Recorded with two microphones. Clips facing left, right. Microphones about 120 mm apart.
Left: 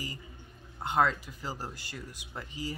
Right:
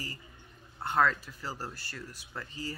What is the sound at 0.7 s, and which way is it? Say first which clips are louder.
Speech: even; 15° left (ahead or behind).